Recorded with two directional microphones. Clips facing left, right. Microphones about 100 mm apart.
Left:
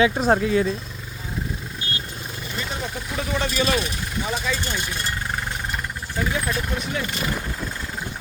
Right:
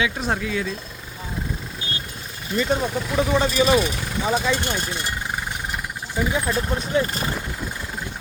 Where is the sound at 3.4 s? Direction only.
10° right (ahead or behind).